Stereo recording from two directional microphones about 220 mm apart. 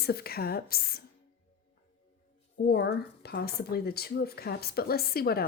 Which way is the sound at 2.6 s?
50° left (ahead or behind).